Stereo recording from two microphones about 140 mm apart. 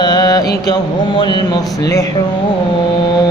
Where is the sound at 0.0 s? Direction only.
30° left (ahead or behind).